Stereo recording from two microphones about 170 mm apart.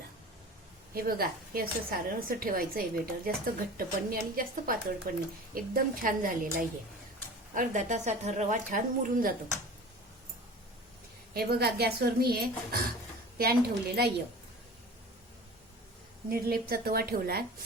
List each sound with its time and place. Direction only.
0.9 s a woman's voice: 60° right (ahead or behind)
11.3 s a woman's voice: 65° right (ahead or behind)
16.3 s a woman's voice: 60° right (ahead or behind)